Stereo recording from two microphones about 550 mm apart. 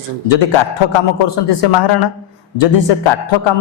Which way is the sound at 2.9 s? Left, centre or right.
Left.